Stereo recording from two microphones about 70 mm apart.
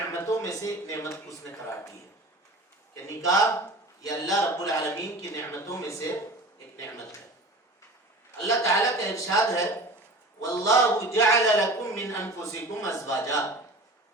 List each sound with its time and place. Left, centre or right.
0.1 s a sound: left
0.4 s a man's voice: left
2.9 s a man's voice: left
8.4 s a man's voice: left